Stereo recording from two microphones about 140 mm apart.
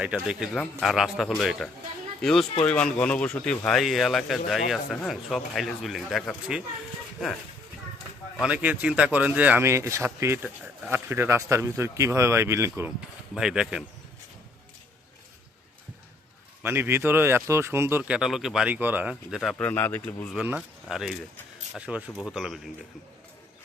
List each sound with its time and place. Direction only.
0.0 s speech: 5° right (ahead or behind)
8.4 s speech: 10° right (ahead or behind)
13.3 s speech: 5° right (ahead or behind)
16.6 s speech: 15° right (ahead or behind)
18.2 s speech: centre (ahead or behind)
19.6 s speech: 10° left (ahead or behind)
20.3 s speech: 10° right (ahead or behind)